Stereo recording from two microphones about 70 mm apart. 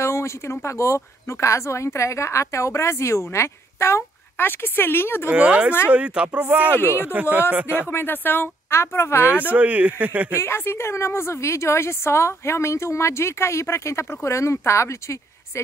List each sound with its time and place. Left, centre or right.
0.0 s speech: left
5.3 s speech: centre
7.9 s speech: left
9.5 s speech: right
10.4 s speech: left